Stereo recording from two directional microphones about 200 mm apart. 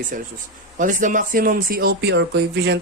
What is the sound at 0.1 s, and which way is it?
Speech, 45° right (ahead or behind).